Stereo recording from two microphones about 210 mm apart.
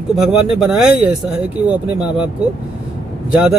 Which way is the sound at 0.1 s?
Centre (ahead or behind).